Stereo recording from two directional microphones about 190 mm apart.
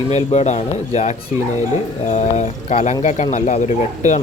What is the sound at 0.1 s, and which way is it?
Speech, 35° left (ahead or behind).